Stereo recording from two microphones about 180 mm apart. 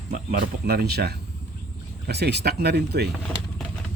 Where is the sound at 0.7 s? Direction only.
65° right (ahead or behind).